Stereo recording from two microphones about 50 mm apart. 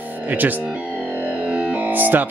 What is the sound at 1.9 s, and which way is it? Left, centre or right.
Music, right.